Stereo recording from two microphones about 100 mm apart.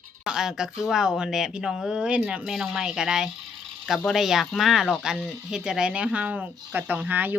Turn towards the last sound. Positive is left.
turn(degrees=-15)  # may be behind; listen again after turning